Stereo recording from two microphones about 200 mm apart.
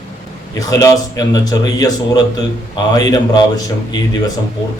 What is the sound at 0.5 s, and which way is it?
A man's voice, 15° left (ahead or behind).